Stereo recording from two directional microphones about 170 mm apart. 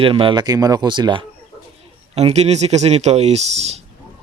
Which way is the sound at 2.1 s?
40° right (ahead or behind).